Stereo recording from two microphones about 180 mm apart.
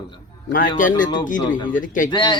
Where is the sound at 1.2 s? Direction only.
45° left (ahead or behind).